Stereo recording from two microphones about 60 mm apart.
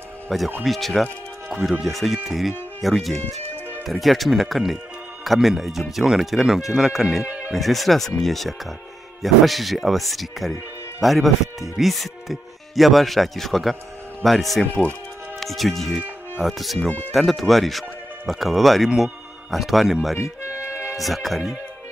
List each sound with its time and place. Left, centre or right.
0.3 s speech: centre
7.2 s speech: right
7.5 s speech: centre
14.6 s speech: left
15.4 s speech: centre
20.2 s music: left
20.9 s speech: centre